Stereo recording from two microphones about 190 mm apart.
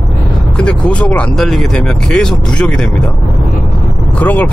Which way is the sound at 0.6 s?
5° left (ahead or behind).